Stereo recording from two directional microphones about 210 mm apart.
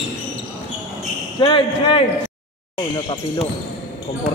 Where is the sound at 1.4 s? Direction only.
25° left (ahead or behind).